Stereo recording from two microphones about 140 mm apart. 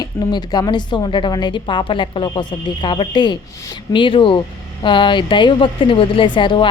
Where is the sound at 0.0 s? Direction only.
30° left (ahead or behind).